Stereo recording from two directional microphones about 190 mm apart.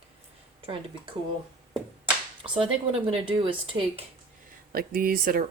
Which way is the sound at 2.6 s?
25° right (ahead or behind).